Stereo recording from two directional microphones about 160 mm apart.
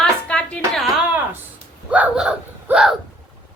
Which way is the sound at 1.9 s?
10° right (ahead or behind).